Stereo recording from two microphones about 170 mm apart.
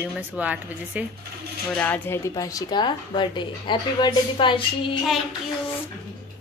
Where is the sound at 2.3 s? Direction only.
25° left (ahead or behind).